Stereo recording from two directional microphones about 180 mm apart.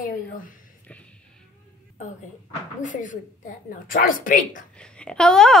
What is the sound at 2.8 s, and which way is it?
A woman's voice, 45° left (ahead or behind).